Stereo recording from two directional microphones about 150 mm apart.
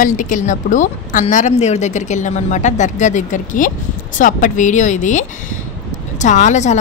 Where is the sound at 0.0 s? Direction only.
60° left (ahead or behind).